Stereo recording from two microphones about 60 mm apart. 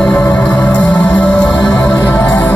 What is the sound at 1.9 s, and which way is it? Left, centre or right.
Music, left.